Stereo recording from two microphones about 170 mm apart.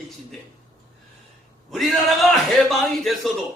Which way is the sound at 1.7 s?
Centre (ahead or behind).